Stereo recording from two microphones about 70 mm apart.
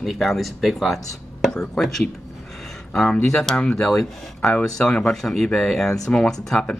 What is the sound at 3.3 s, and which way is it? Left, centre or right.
Speech, centre.